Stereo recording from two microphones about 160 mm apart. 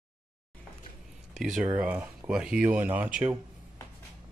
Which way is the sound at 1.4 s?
Centre (ahead or behind).